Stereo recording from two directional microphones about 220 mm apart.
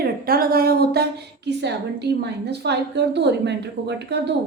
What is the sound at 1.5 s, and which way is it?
Speech, 50° right (ahead or behind).